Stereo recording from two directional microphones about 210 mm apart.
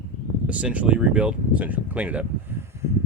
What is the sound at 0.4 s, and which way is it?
Speech, 5° right (ahead or behind).